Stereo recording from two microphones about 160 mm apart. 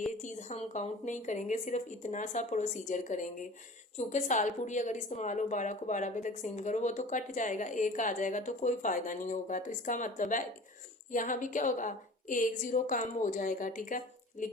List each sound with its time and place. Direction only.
0.2 s a woman's voice: 50° left (ahead or behind)